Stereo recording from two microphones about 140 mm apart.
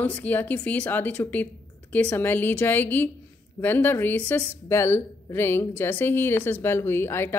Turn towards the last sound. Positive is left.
turn(degrees=15)  # may be behind; listen again after turning